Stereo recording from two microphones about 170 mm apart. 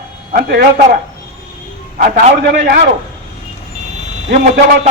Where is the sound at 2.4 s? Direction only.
75° right (ahead or behind).